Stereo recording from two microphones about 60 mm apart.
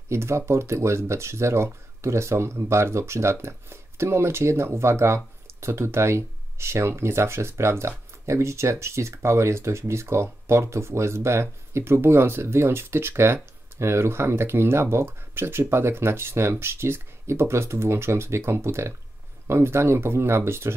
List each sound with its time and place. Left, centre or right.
0.1 s speech: right